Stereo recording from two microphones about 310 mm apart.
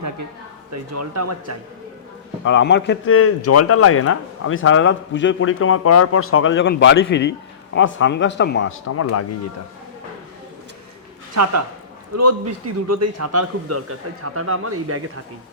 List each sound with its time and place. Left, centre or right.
0.7 s a man's voice: right
2.4 s speech: left
12.1 s a man's voice: right